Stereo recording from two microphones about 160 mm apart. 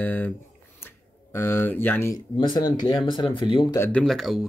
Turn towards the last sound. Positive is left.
turn(degrees=0)  # may be behind; listen again after turning